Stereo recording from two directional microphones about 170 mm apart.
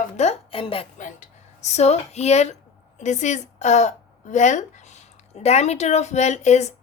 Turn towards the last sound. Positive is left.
turn(degrees=40)  # may be behind; listen again after turning